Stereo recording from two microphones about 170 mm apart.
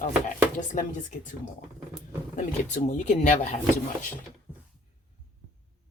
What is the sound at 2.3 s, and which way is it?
Speech, 45° left (ahead or behind).